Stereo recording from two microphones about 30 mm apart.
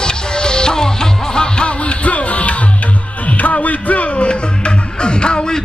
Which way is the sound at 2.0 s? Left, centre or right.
Left.